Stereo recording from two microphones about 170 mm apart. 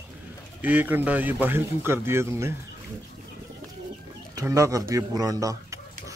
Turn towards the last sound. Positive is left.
turn(degrees=-20)  # may be behind; listen again after turning